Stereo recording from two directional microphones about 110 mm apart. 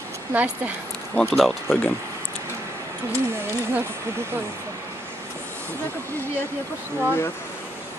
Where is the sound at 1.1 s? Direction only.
5° left (ahead or behind).